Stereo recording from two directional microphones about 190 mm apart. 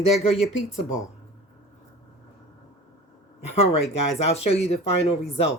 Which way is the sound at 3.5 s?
30° left (ahead or behind).